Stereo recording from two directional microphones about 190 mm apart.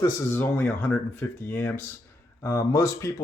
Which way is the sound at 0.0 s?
15° left (ahead or behind).